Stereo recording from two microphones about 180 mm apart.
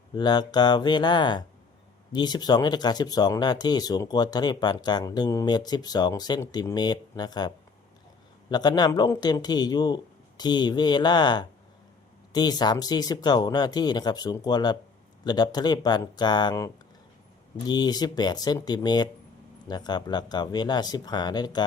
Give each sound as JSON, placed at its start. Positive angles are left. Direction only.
{"t": 0.2, "sound": "speech", "side_deg": 25}